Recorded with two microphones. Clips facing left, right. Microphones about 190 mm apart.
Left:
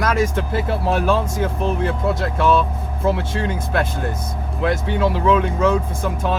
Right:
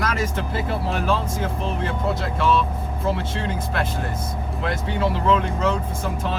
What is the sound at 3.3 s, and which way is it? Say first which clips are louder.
Speech: left 4 dB; 50° left (ahead or behind).